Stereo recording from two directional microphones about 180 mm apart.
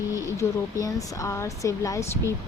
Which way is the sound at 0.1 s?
20° left (ahead or behind).